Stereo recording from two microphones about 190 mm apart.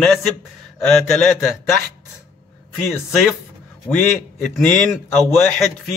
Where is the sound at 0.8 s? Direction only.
Centre (ahead or behind).